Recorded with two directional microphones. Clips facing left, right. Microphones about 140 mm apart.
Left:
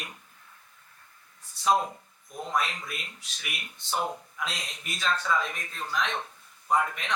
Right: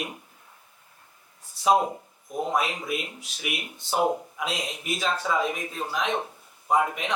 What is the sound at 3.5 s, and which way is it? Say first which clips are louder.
Speech: right 8 dB; 20° right (ahead or behind).